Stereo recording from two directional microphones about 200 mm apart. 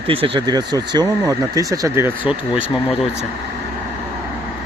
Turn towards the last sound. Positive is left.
turn(degrees=10)  # may be behind; listen again after turning